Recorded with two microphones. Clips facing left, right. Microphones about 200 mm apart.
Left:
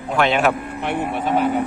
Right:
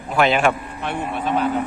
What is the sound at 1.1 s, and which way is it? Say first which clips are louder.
Speech: left 1 dB; 10° left (ahead or behind).